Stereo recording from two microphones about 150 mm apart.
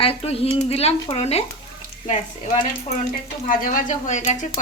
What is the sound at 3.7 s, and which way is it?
Speech, 55° left (ahead or behind).